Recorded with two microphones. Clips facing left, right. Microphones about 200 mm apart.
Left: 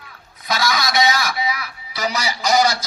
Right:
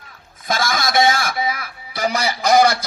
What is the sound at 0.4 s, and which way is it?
A man's voice, 50° right (ahead or behind).